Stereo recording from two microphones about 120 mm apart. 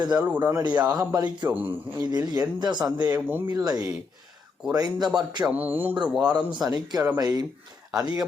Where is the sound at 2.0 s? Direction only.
35° right (ahead or behind).